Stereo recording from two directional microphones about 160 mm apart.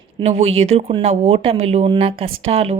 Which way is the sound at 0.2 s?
45° right (ahead or behind).